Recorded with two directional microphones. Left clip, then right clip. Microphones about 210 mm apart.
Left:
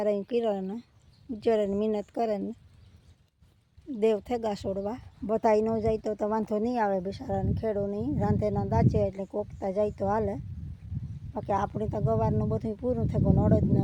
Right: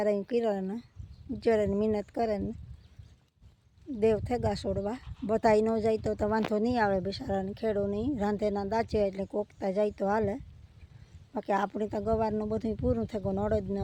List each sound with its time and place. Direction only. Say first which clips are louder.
0.0 s speech: left 1 dB; centre (ahead or behind)
3.9 s speech: left 1 dB; 5° left (ahead or behind)